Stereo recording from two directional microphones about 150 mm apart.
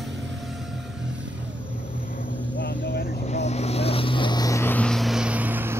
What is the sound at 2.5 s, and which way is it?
Vehicle, 65° left (ahead or behind).